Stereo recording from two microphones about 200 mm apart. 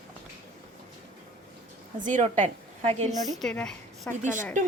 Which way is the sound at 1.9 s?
40° right (ahead or behind).